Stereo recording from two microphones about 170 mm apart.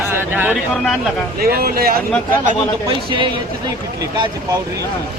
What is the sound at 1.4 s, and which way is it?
Speech, 60° right (ahead or behind).